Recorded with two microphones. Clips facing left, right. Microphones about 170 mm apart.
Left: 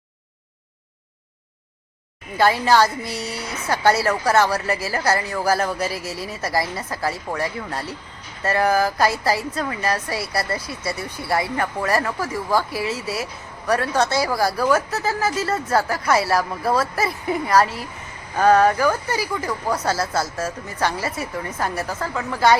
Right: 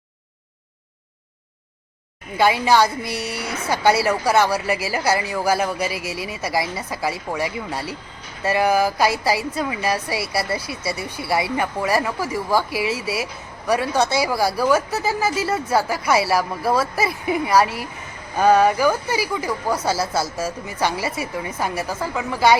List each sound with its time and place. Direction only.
2.4 s speech: centre (ahead or behind)
3.0 s speech: 25° left (ahead or behind)
4.0 s speech: 5° right (ahead or behind)
6.0 s speech: 25° left (ahead or behind)
6.2 s speech: 5° right (ahead or behind)